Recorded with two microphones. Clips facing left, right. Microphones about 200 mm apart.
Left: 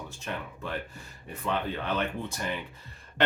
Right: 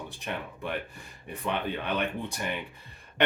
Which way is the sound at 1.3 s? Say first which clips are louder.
Even; 15° right (ahead or behind).